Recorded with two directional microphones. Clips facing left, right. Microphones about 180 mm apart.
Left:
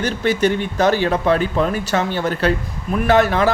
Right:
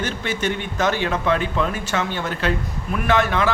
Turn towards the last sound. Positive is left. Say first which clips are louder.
# left 5 dB
turn(degrees=40)  # may be behind; listen again after turning